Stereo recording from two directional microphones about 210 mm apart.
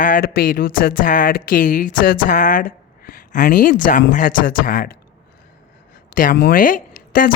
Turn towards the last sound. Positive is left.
turn(degrees=45)  # may be behind; listen again after turning